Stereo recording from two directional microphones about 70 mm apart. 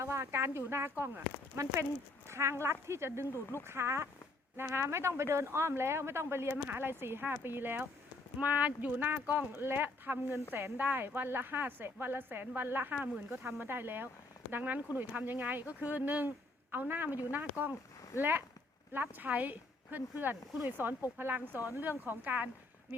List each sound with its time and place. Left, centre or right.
0.0 s a woman's voice: right
2.2 s a woman's voice: right